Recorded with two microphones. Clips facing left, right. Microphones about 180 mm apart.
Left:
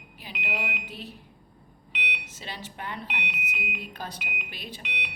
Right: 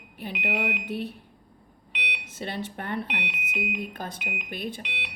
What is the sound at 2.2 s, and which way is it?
A woman's voice, 55° right (ahead or behind).